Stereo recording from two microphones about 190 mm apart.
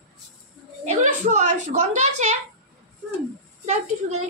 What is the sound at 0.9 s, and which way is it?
Speech, 40° right (ahead or behind).